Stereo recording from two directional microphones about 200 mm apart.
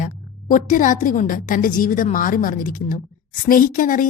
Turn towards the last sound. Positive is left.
turn(degrees=40)  # may be behind; listen again after turning